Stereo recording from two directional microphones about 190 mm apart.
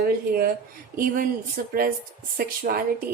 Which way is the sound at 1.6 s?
50° right (ahead or behind).